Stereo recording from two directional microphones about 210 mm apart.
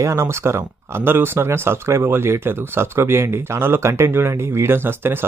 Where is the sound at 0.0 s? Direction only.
15° right (ahead or behind).